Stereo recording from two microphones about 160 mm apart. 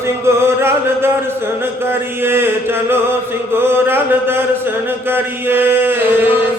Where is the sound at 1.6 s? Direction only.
15° right (ahead or behind).